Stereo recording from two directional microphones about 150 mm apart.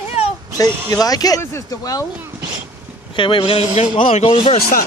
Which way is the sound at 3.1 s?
35° left (ahead or behind).